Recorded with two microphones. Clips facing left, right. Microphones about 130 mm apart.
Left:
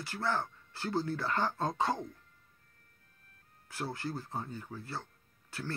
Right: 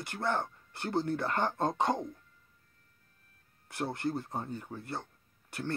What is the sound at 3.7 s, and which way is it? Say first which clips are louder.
Speech: right 4 dB; 20° right (ahead or behind).